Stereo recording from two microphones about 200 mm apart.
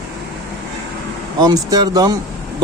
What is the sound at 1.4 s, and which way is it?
Speech, 20° right (ahead or behind).